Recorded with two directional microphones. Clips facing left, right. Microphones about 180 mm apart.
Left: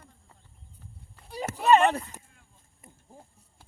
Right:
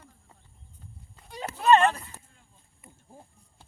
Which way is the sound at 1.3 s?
10° left (ahead or behind).